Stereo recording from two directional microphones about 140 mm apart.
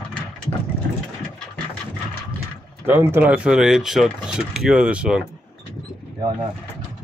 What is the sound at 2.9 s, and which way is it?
Speech, 15° right (ahead or behind).